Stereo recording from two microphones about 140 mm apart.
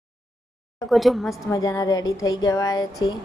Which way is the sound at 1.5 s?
25° left (ahead or behind).